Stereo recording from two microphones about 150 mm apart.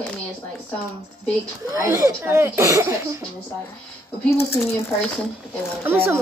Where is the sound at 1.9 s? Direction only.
20° right (ahead or behind).